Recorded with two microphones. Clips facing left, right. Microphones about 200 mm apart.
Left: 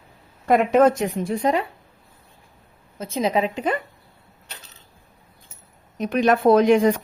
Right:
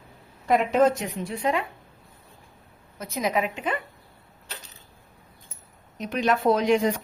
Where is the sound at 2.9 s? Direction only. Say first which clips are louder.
Left 4 dB; 25° left (ahead or behind).